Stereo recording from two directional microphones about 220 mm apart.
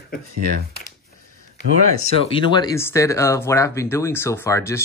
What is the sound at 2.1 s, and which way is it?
Speech, 25° left (ahead or behind).